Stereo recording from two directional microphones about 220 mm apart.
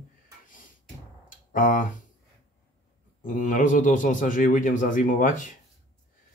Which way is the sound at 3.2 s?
35° left (ahead or behind).